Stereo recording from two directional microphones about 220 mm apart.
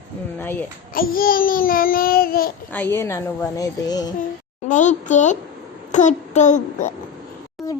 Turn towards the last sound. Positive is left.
turn(degrees=15)  # may be behind; listen again after turning